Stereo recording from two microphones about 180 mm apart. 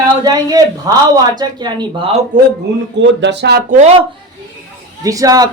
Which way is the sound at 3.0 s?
80° right.